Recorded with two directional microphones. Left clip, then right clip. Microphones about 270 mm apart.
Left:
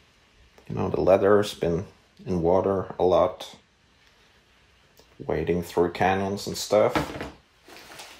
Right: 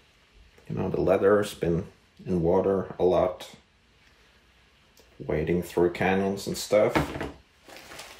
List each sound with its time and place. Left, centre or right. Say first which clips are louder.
0.7 s speech: left 4 dB; left
5.2 s speech: left 1 dB; left